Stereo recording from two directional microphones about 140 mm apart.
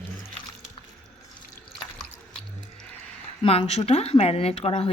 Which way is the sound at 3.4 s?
45° left (ahead or behind).